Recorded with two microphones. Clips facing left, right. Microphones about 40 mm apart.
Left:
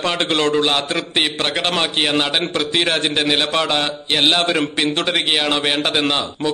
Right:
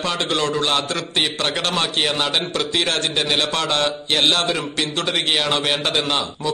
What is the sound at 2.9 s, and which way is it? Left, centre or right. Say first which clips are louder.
A man's voice: left 3 dB; centre.